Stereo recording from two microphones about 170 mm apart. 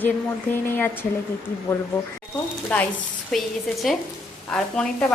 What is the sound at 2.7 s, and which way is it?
A woman's voice, 5° left (ahead or behind).